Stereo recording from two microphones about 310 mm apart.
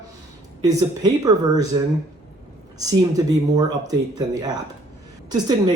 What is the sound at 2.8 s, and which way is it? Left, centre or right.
Speech, centre.